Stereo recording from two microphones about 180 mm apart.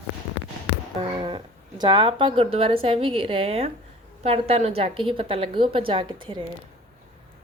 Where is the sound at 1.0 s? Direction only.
30° right (ahead or behind).